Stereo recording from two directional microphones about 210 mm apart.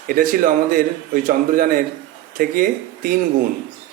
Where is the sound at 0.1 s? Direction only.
40° right (ahead or behind).